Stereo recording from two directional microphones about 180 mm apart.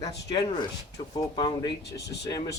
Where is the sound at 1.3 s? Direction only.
25° left (ahead or behind).